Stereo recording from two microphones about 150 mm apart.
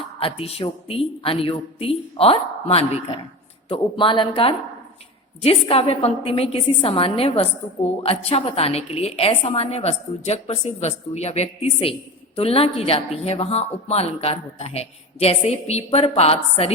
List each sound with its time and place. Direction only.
0.2 s a woman's voice: 40° left (ahead or behind)